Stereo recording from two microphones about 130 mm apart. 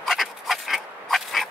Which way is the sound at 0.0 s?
Centre (ahead or behind).